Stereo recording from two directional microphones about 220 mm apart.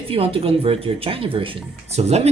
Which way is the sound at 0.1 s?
25° right (ahead or behind).